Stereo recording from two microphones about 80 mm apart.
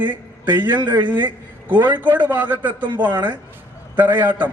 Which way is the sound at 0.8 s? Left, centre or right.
Right.